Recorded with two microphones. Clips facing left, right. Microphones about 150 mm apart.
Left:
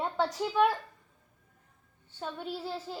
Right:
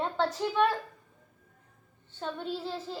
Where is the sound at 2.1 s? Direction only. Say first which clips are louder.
Right 2 dB; 10° left (ahead or behind).